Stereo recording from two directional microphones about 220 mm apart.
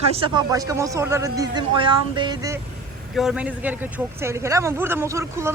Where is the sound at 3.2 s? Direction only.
5° right (ahead or behind).